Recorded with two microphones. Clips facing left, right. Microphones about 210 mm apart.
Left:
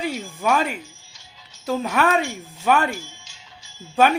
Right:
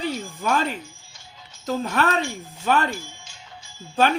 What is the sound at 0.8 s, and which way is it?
Music, 50° right (ahead or behind).